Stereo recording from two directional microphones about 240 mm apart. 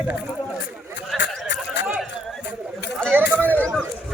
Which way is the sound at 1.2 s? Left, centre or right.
Left.